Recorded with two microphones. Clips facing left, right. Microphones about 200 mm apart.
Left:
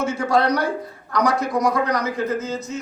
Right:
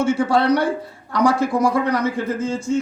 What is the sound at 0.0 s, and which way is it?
A man's voice, 30° right (ahead or behind).